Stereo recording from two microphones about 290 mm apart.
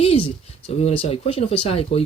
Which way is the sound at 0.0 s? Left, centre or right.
Centre.